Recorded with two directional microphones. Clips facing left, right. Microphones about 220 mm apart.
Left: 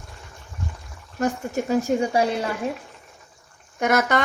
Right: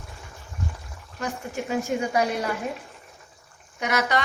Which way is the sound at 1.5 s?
45° left (ahead or behind).